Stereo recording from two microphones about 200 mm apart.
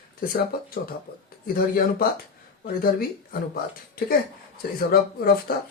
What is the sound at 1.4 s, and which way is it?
Speech, 45° left (ahead or behind).